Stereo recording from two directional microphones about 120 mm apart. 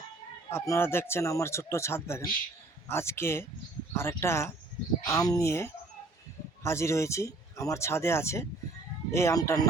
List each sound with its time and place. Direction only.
0.5 s speech: 25° left (ahead or behind)